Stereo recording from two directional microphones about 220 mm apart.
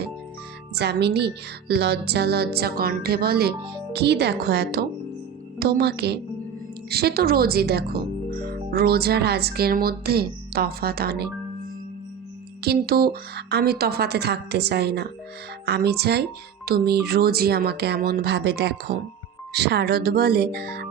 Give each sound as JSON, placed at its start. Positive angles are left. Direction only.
{"t": 0.8, "sound": "speech", "side_deg": -50}
{"t": 12.6, "sound": "speech", "side_deg": -45}